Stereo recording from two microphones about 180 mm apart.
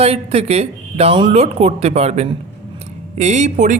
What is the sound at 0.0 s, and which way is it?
Speech, 35° right (ahead or behind).